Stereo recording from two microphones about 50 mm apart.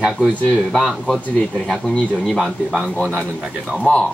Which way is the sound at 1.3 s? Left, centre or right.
Centre.